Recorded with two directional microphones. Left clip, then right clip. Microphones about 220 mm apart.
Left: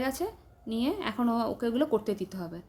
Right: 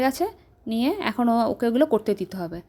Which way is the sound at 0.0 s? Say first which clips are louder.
Right 8 dB; 35° right (ahead or behind).